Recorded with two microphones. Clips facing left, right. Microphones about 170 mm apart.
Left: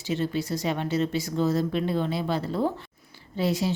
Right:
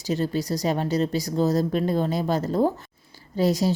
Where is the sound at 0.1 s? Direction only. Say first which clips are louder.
Right 2 dB; 40° right (ahead or behind).